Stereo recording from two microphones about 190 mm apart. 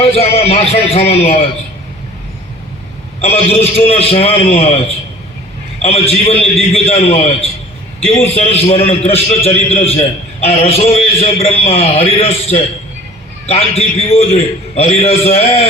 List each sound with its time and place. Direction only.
0.0 s a man's voice: 30° left (ahead or behind)
3.2 s a man's voice: 30° left (ahead or behind)
5.8 s a man's voice: 30° left (ahead or behind)